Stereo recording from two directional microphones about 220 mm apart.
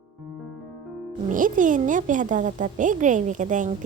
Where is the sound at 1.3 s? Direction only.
35° right (ahead or behind).